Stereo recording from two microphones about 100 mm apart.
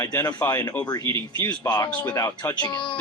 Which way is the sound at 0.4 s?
30° left (ahead or behind).